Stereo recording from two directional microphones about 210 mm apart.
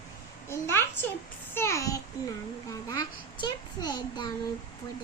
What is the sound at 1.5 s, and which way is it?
A child's voice, 15° left (ahead or behind).